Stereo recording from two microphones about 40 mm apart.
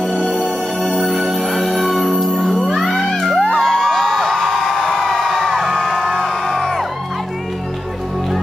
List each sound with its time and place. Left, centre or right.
0.9 s music: centre
3.2 s a sound: centre
4.8 s a sound: centre
5.1 s music: centre
5.9 s music: centre
6.2 s music: centre